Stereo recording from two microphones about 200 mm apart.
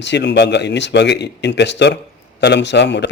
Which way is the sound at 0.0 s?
60° left (ahead or behind).